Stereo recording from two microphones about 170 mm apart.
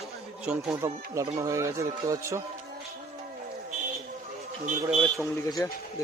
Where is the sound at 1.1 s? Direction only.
20° right (ahead or behind).